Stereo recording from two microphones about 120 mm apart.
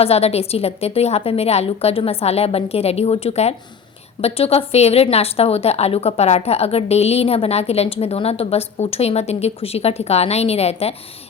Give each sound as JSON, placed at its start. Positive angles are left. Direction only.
{"t": 0.0, "sound": "a woman's voice", "side_deg": 60}